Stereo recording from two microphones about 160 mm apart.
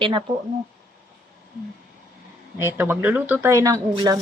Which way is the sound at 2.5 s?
15° right (ahead or behind).